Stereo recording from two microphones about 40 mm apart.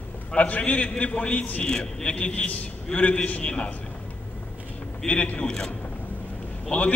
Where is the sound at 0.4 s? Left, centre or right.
Left.